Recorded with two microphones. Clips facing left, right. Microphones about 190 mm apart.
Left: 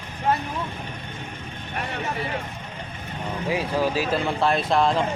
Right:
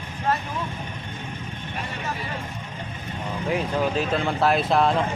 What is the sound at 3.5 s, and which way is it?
Speech, 5° left (ahead or behind).